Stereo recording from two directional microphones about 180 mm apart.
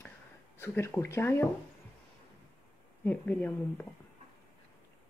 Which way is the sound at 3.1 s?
10° left (ahead or behind).